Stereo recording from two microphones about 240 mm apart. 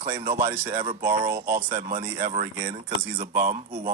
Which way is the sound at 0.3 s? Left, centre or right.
Centre.